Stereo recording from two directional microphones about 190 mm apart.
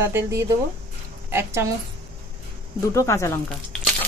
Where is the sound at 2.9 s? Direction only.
15° left (ahead or behind).